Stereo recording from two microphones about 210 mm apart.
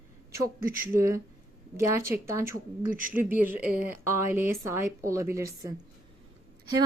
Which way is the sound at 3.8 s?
10° right (ahead or behind).